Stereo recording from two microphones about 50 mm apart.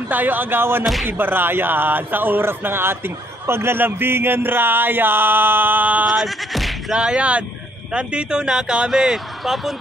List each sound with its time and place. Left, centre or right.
0.1 s speech: right
6.2 s bleat: centre
6.9 s speech: centre